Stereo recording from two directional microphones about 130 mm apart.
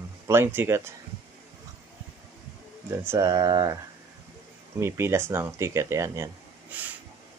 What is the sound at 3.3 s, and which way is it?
Speech, 30° right (ahead or behind).